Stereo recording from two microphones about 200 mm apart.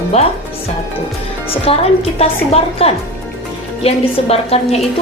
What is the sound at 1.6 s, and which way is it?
A woman's voice, 30° left (ahead or behind).